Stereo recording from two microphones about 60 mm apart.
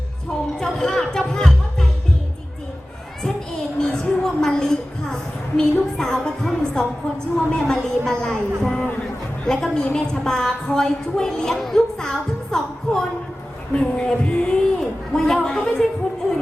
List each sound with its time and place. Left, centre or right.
0.6 s music: centre
3.8 s a woman's voice: centre